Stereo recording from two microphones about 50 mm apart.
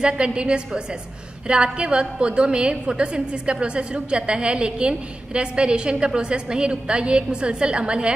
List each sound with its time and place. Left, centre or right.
0.0 s a woman's voice: centre